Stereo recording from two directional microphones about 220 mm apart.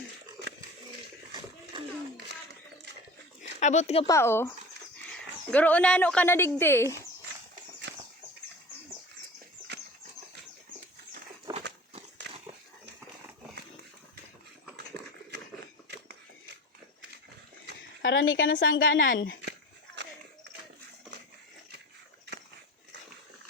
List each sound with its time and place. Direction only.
3.6 s speech: 35° left (ahead or behind)
4.0 s speech: 10° left (ahead or behind)
11.5 s a sound: 15° right (ahead or behind)
18.0 s a woman's voice: 55° left (ahead or behind)